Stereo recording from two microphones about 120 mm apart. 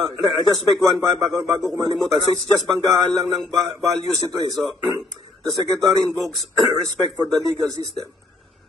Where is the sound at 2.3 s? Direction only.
30° right (ahead or behind).